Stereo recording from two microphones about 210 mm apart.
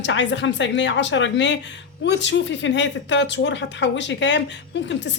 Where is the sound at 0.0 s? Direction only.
60° left (ahead or behind).